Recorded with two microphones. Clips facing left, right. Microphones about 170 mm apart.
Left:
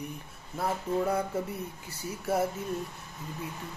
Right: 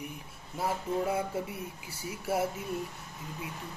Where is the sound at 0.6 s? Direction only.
5° right (ahead or behind).